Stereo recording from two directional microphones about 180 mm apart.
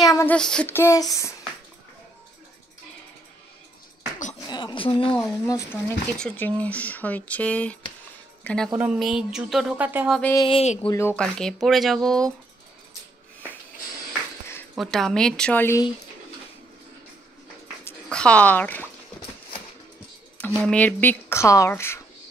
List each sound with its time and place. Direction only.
0.0 s child singing: 20° left (ahead or behind)
0.3 s speech: 5° left (ahead or behind)
4.4 s speech: 25° left (ahead or behind)
5.1 s speech: 15° left (ahead or behind)
8.7 s speech: 5° right (ahead or behind)
10.0 s speech: centre (ahead or behind)
10.5 s speech: 35° left (ahead or behind)
10.9 s speech: 15° left (ahead or behind)
14.8 s speech: centre (ahead or behind)
17.8 s speech: 5° left (ahead or behind)
20.6 s speech: 10° left (ahead or behind)